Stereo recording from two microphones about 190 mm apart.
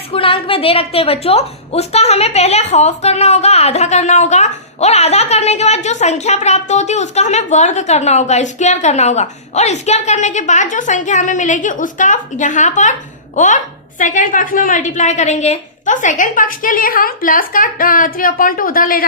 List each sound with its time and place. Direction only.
0.1 s a woman's voice: 30° left (ahead or behind); by 19.0 s 50° left (ahead or behind)